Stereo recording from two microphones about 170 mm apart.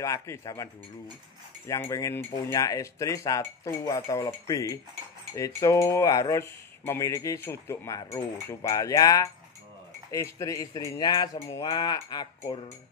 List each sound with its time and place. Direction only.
0.0 s speech: 15° left (ahead or behind)
1.7 s speech: 20° left (ahead or behind)